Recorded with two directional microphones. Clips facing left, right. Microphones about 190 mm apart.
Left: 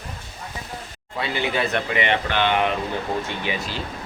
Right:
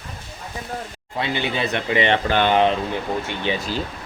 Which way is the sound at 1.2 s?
25° right (ahead or behind).